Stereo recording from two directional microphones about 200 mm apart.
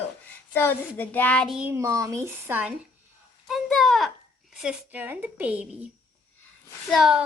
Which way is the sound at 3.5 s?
Centre (ahead or behind).